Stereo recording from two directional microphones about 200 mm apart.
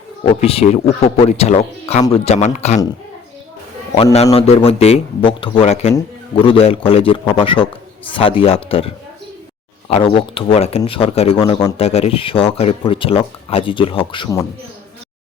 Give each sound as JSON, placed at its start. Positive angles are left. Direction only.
{"t": 0.4, "sound": "speech", "side_deg": 30}
{"t": 3.9, "sound": "speech", "side_deg": 30}
{"t": 9.9, "sound": "speech", "side_deg": 25}